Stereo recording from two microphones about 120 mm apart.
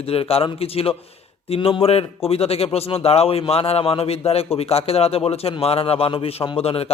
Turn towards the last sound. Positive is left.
turn(degrees=55)  # may be behind; listen again after turning